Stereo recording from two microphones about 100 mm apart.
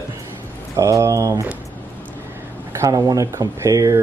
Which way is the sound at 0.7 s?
30° right (ahead or behind).